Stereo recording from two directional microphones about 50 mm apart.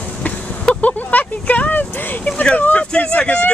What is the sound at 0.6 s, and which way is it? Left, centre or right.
Vehicle, left.